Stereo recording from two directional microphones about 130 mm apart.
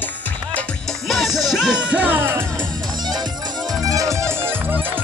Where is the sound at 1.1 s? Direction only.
Centre (ahead or behind).